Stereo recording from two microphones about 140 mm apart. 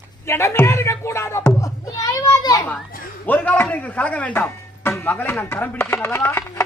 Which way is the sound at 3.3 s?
15° left (ahead or behind).